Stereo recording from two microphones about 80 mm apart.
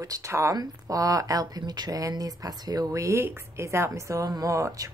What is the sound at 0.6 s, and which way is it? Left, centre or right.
A woman's voice, right.